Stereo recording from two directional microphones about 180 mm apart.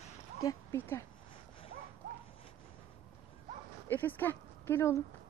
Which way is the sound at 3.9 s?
10° left (ahead or behind).